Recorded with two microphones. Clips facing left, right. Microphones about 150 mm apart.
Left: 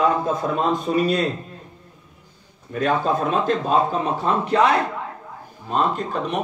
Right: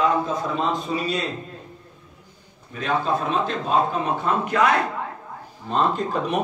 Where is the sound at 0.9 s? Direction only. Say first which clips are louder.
Left 6 dB; 50° left (ahead or behind).